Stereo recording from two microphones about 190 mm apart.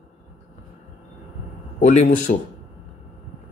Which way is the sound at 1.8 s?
40° left (ahead or behind).